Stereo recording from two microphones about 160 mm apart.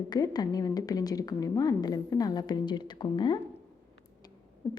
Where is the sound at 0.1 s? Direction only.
25° left (ahead or behind).